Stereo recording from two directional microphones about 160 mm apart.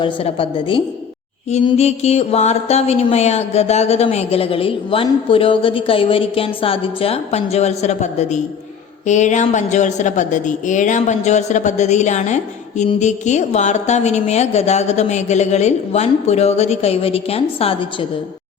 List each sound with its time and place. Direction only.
0.0 s music: 35° left (ahead or behind)
9.0 s a woman's voice: 50° left (ahead or behind)